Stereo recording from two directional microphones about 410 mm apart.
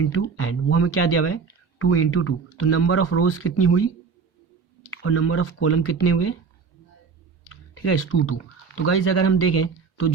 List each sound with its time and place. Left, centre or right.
0.0 s speech: left
4.9 s speech: left
7.5 s speech: left